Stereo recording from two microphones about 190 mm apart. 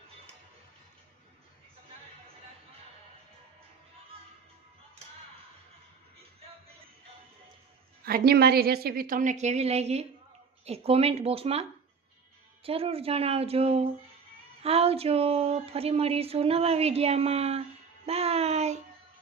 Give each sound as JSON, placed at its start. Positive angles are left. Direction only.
{"t": 8.0, "sound": "a woman's voice", "side_deg": -55}
{"t": 12.6, "sound": "speech", "side_deg": -30}